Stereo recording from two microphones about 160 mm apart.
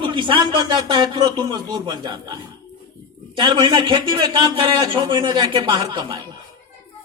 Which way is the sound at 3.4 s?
30° right (ahead or behind).